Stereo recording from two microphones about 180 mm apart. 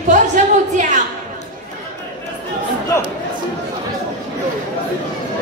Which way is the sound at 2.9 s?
15° left (ahead or behind).